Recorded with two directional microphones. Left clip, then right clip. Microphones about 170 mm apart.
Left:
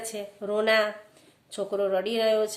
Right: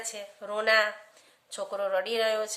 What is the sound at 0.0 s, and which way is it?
Speech, 5° right (ahead or behind).